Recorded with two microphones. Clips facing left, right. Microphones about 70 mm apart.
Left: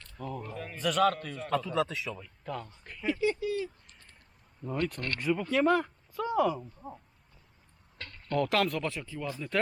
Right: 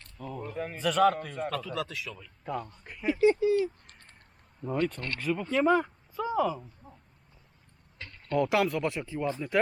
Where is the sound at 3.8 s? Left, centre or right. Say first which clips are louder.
Right 2 dB; right.